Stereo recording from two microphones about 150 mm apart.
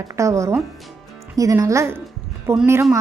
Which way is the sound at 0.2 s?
20° right (ahead or behind).